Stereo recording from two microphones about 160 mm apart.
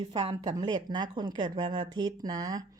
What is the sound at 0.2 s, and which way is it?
A woman's voice, 30° right (ahead or behind).